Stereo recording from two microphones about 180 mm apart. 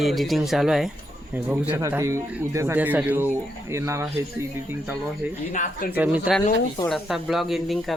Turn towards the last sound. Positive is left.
turn(degrees=0)  # may be behind; listen again after turning